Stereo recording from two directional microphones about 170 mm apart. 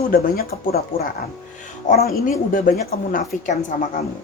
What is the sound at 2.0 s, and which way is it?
Speech, 60° left (ahead or behind).